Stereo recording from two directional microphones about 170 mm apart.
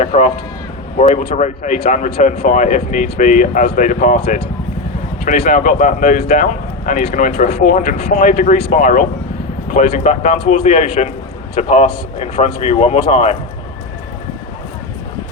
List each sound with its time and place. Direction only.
0.1 s speech: 45° left (ahead or behind)
5.5 s speech: 50° left (ahead or behind)